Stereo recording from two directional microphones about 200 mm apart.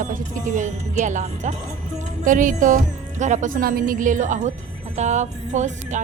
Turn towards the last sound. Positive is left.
turn(degrees=-35)  # may be behind; listen again after turning